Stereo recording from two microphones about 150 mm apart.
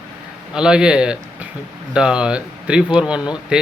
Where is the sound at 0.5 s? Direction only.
5° right (ahead or behind).